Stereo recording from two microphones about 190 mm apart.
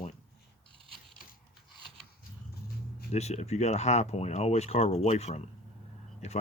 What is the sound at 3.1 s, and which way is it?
Speech, 35° left (ahead or behind).